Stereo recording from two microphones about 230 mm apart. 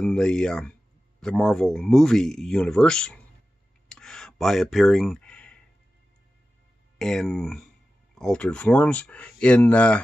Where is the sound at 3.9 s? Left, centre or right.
Centre.